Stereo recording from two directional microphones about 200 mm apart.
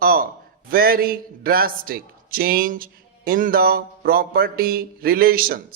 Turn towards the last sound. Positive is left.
turn(degrees=-45)  # may be behind; listen again after turning